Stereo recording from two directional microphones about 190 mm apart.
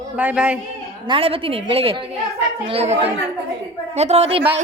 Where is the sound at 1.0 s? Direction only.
30° right (ahead or behind).